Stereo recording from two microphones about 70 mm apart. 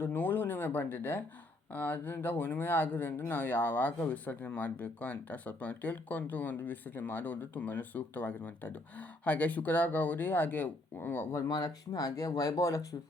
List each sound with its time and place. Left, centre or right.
0.0 s speech: left
11.3 s speech: left